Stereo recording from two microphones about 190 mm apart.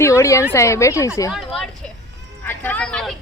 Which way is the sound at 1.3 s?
Centre (ahead or behind).